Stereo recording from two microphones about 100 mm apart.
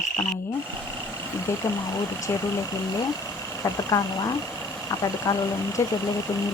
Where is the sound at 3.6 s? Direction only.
35° left (ahead or behind).